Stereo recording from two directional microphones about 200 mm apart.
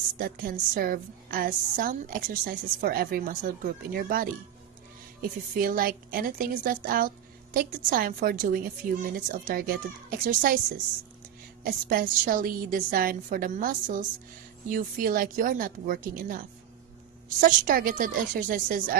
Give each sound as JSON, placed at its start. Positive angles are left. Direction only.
{"t": 0.2, "sound": "a woman's voice", "side_deg": -45}
{"t": 5.5, "sound": "a woman's voice", "side_deg": -45}